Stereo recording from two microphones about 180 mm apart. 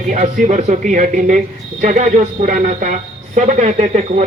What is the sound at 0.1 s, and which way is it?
A woman's voice, 45° right (ahead or behind).